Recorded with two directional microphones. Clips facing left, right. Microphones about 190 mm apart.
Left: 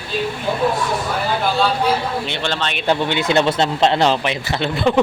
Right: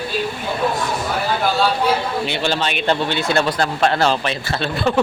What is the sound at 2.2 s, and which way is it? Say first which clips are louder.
Speech: right 2 dB; 5° right (ahead or behind).